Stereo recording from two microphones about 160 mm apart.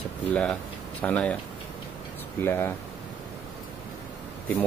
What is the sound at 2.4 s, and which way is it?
Speech, 15° left (ahead or behind).